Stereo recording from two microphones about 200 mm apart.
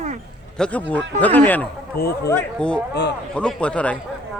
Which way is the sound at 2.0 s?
50° left (ahead or behind).